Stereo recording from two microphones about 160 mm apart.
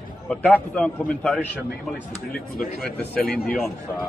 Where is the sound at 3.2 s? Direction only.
70° left (ahead or behind).